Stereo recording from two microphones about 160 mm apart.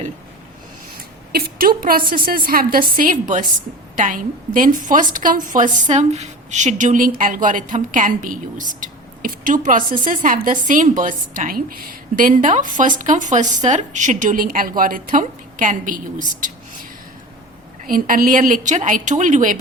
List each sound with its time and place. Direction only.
1.3 s a woman's voice: 70° right (ahead or behind)
17.8 s a woman's voice: 60° right (ahead or behind)